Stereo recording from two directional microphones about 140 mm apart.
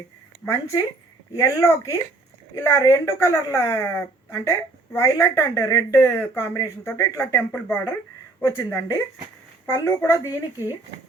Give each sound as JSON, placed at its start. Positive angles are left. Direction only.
{"t": 0.4, "sound": "a woman's voice", "side_deg": 20}